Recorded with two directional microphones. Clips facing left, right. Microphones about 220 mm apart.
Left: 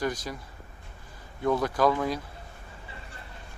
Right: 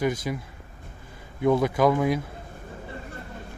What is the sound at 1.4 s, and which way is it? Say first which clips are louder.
Speech: right 4 dB; 20° right (ahead or behind).